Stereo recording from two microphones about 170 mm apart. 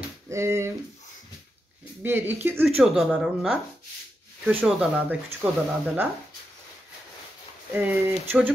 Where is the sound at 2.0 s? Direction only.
10° right (ahead or behind).